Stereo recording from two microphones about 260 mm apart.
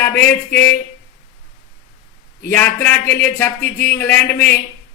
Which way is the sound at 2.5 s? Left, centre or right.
Centre.